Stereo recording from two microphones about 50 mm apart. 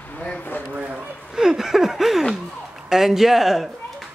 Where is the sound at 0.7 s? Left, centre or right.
Right.